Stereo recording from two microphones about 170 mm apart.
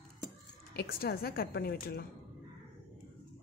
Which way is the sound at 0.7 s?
65° left (ahead or behind).